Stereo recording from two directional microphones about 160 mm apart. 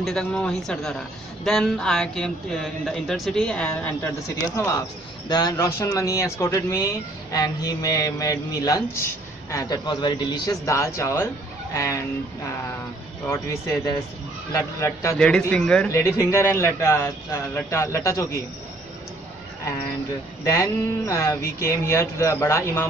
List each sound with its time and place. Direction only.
0.0 s a man's voice: 5° left (ahead or behind)
4.6 s a man's voice: 20° left (ahead or behind)
13.3 s a man's voice: 20° left (ahead or behind)
15.1 s a man's voice: 5° left (ahead or behind)
15.9 s a man's voice: 20° left (ahead or behind)
20.4 s a man's voice: 20° left (ahead or behind)